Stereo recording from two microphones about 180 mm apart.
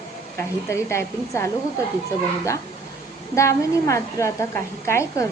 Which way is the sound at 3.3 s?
15° left (ahead or behind).